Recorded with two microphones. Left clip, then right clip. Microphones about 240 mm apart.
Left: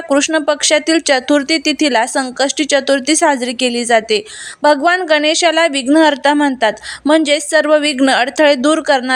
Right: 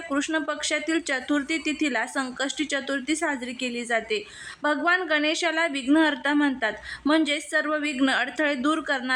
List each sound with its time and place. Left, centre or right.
0.1 s a woman's voice: left